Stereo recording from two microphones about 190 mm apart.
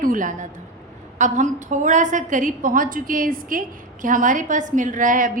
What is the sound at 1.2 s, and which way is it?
A woman's voice, 40° right (ahead or behind).